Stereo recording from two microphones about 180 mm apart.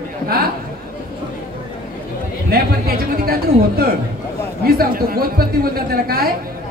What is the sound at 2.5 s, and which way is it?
Speech, 60° right (ahead or behind).